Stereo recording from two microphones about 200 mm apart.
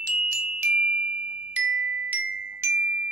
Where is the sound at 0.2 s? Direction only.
35° left (ahead or behind).